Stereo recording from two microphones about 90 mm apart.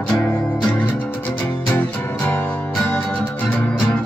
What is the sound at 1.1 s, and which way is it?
Music, 20° left (ahead or behind).